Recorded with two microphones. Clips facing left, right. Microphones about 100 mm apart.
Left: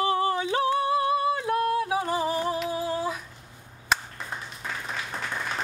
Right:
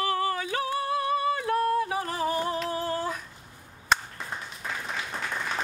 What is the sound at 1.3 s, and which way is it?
Music, 5° left (ahead or behind).